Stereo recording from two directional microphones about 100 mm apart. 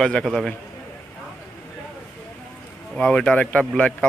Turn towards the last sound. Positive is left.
turn(degrees=10)  # may be behind; listen again after turning